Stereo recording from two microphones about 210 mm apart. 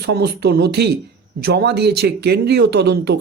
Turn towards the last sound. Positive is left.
turn(degrees=-50)  # may be behind; listen again after turning